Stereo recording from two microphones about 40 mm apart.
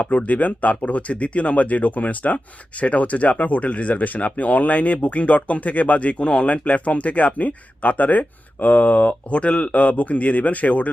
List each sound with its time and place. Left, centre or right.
0.0 s speech: left